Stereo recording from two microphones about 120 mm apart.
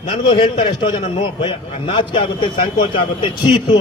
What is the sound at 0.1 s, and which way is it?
A man's voice, 45° left (ahead or behind).